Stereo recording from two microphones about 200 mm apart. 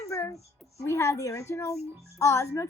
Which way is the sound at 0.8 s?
15° left (ahead or behind).